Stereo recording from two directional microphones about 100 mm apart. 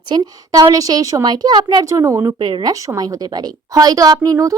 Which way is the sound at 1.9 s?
30° right (ahead or behind).